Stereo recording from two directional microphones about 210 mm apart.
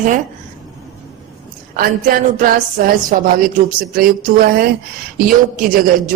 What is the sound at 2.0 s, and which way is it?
A woman's voice, 40° right (ahead or behind).